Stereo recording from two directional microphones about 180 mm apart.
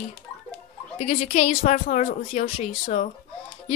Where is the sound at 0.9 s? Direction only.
40° left (ahead or behind).